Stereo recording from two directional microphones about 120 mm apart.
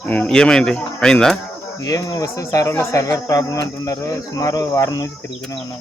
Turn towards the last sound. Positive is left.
turn(degrees=30)  # may be behind; listen again after turning